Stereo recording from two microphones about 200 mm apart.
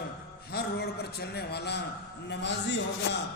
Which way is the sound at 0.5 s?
50° left (ahead or behind).